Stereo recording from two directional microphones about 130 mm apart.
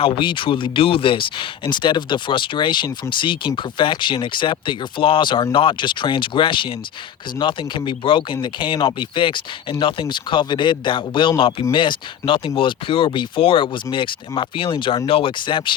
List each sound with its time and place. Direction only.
0.0 s speech: 40° left (ahead or behind)